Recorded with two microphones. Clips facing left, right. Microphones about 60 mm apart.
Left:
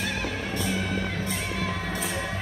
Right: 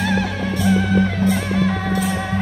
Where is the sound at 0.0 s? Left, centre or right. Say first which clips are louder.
Right 9 dB; right.